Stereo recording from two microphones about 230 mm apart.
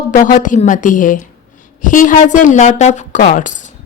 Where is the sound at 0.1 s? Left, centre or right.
Left.